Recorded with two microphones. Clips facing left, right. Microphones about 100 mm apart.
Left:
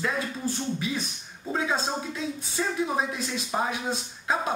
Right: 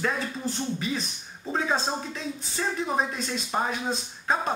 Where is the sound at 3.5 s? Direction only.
5° left (ahead or behind).